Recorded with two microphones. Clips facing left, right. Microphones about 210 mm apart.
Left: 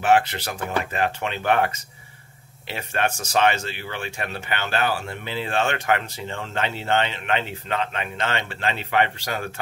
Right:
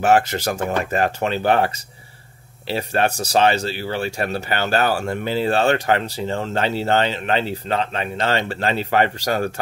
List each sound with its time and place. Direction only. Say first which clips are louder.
0.0 s speech: right 3 dB; 45° right (ahead or behind)